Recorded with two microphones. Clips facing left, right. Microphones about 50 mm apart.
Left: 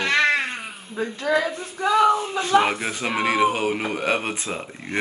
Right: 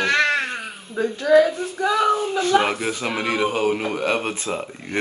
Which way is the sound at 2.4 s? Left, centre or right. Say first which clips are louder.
Even; centre.